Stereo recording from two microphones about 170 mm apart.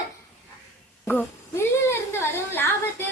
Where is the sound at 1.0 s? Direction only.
10° left (ahead or behind).